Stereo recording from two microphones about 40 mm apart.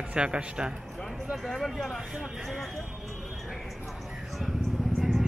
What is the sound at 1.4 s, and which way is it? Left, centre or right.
Speech, centre.